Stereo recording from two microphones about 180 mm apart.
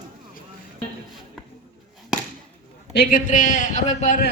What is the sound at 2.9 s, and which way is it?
A man's voice, 55° left (ahead or behind).